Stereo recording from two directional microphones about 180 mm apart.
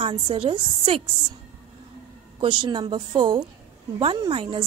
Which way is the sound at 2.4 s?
25° right (ahead or behind).